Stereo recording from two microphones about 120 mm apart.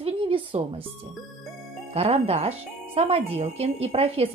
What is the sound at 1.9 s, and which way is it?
A woman's voice, 55° right (ahead or behind).